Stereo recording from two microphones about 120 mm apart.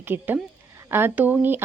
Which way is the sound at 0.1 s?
15° right (ahead or behind).